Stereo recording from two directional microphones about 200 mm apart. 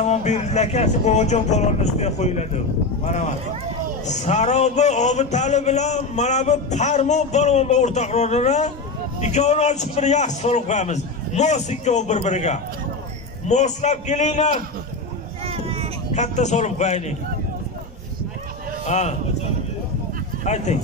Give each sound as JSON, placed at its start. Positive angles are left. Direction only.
{"t": 0.0, "sound": "a man's voice", "side_deg": 35}
{"t": 15.4, "sound": "vehicle", "side_deg": -30}
{"t": 16.2, "sound": "a man's voice", "side_deg": 35}
{"t": 18.9, "sound": "a man's voice", "side_deg": 35}
{"t": 20.4, "sound": "a man's voice", "side_deg": 35}